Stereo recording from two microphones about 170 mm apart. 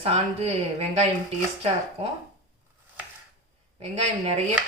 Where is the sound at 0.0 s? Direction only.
35° right (ahead or behind).